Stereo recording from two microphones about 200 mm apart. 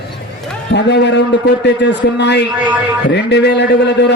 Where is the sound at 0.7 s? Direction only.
60° left (ahead or behind).